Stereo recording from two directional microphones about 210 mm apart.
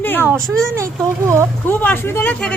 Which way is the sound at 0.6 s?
15° right (ahead or behind).